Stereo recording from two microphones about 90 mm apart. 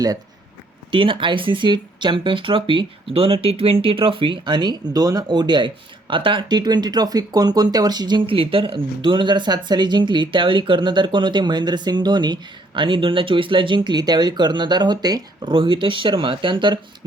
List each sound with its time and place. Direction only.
0.9 s speech: 70° right (ahead or behind)
6.5 s speech: 50° right (ahead or behind)
8.3 s speech: 80° right